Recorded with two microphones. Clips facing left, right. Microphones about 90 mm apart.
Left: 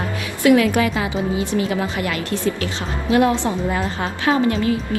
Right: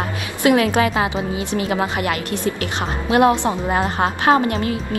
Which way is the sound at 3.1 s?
25° right (ahead or behind).